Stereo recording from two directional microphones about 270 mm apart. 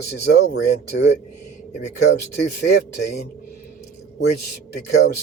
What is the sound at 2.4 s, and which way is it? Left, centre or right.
Speech, left.